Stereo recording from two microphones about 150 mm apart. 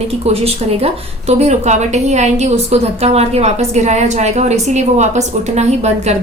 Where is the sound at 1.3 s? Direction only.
50° right (ahead or behind).